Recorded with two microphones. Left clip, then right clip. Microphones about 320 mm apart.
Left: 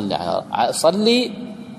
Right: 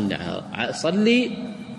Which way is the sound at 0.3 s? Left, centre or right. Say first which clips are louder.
Left 8 dB; centre.